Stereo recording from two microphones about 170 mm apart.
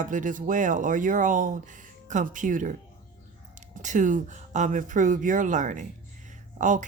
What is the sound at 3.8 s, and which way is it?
Speech, 50° right (ahead or behind).